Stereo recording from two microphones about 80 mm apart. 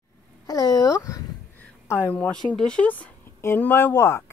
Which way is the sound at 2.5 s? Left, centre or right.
Centre.